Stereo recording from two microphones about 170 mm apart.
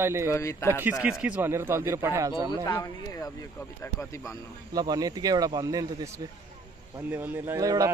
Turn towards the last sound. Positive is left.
turn(degrees=-20)  # may be behind; listen again after turning